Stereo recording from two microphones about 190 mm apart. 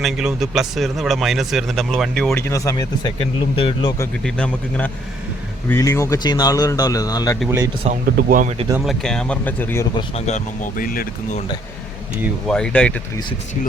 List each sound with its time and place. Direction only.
0.0 s speech: centre (ahead or behind)
2.3 s speech: 15° left (ahead or behind)
4.2 s speech: 5° left (ahead or behind)
8.1 s speech: 45° right (ahead or behind)
8.8 s speech: centre (ahead or behind)
9.9 s speech: 35° left (ahead or behind)
12.5 s speech: 5° left (ahead or behind)